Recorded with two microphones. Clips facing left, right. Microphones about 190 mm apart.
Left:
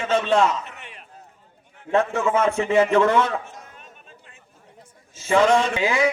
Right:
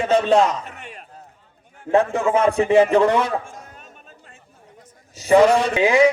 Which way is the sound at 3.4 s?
45° right (ahead or behind).